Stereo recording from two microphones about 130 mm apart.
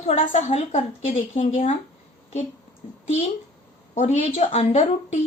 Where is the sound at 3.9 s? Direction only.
65° left (ahead or behind).